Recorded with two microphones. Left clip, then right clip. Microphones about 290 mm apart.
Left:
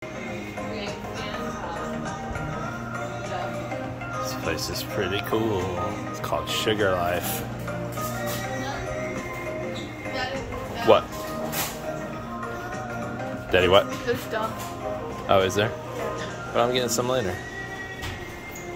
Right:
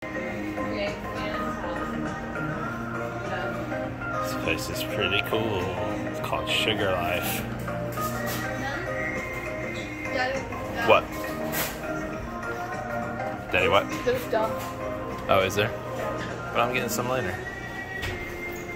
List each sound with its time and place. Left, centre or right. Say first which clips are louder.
4.2 s speech: even; centre
10.9 s speech: left 2 dB; left
13.5 s speech: left 4 dB; left
15.2 s speech: left 2 dB; centre